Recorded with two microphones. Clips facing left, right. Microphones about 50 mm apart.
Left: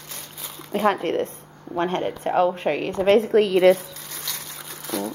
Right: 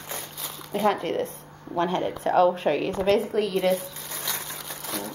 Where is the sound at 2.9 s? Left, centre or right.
Left.